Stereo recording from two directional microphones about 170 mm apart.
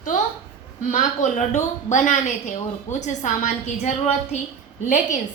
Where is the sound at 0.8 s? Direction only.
45° left (ahead or behind).